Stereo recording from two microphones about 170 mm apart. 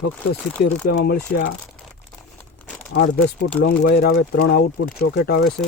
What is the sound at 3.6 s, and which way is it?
Speech, 65° left (ahead or behind).